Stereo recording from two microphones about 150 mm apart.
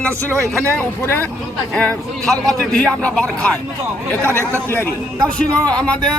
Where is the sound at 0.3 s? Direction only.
20° right (ahead or behind).